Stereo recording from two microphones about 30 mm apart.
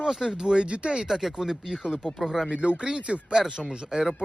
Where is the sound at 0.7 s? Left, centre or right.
Right.